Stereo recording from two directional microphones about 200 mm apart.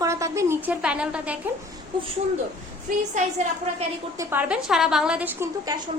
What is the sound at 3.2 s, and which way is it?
Speech, 35° right (ahead or behind).